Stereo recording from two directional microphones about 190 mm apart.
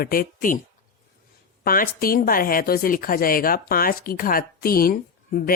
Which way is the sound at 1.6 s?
50° left (ahead or behind).